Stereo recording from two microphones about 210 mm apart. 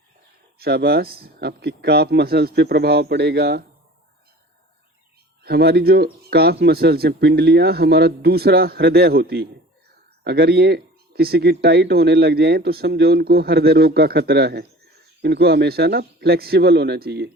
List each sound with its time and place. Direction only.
0.6 s speech: 50° right (ahead or behind)
5.4 s speech: 50° right (ahead or behind)